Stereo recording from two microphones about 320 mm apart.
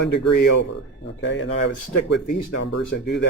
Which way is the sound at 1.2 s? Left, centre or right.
Left.